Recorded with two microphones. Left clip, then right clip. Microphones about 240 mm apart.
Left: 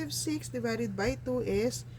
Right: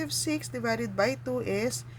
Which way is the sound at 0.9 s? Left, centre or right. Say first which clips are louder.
Right 4 dB; right.